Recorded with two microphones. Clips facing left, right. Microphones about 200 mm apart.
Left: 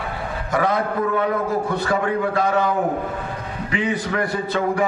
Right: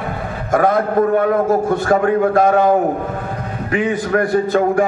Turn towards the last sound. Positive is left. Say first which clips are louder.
# right 7 dB
turn(degrees=-45)  # may be behind; listen again after turning